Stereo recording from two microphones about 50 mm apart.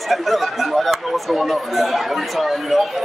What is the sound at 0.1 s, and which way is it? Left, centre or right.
A man's voice, centre.